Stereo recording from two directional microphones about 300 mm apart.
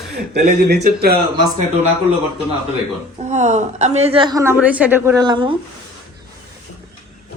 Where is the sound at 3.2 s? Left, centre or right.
Right.